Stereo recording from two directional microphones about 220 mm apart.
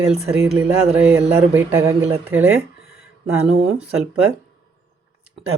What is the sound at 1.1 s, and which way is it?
Speech, 10° right (ahead or behind).